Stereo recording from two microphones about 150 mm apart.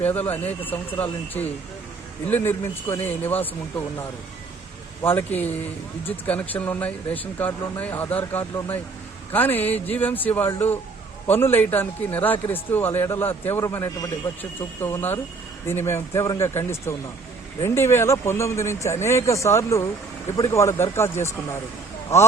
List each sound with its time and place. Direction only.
0.0 s speech: 10° left (ahead or behind)
5.0 s speech: 15° left (ahead or behind)